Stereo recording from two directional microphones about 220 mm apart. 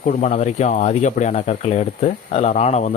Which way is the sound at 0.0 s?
30° left (ahead or behind).